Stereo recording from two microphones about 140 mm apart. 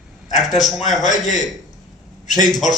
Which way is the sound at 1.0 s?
60° left (ahead or behind).